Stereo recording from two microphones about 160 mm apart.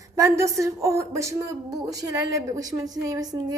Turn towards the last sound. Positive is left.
turn(degrees=-25)  # may be behind; listen again after turning